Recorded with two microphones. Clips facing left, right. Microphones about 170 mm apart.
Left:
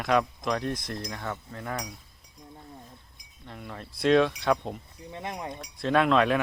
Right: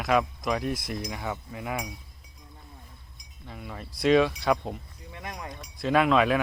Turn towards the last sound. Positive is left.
turn(degrees=-5)  # may be behind; listen again after turning